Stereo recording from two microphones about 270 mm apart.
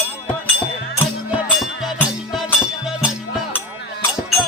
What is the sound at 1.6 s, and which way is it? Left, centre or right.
Music, centre.